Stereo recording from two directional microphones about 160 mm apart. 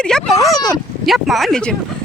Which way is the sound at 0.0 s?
5° left (ahead or behind).